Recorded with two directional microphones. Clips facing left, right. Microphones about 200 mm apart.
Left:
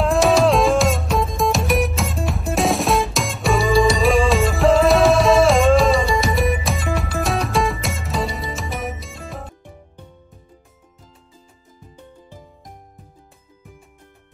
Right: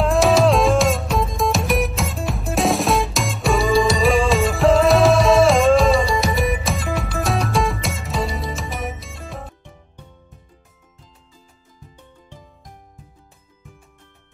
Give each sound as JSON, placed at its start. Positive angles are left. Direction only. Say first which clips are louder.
{"t": 0.0, "sound": "music", "louder": "even", "side_deg": 0}